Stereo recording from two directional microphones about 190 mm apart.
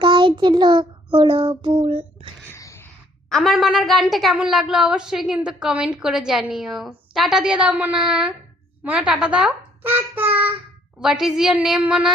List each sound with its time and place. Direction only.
0.0 s child singing: 25° right (ahead or behind)
2.5 s a sound: 15° left (ahead or behind)
3.2 s a woman's voice: centre (ahead or behind)